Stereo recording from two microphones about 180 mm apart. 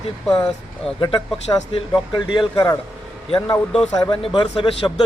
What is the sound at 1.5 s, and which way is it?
Speech, 20° left (ahead or behind).